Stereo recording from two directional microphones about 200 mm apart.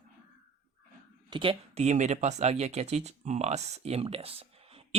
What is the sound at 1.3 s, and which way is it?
Speech, 25° right (ahead or behind).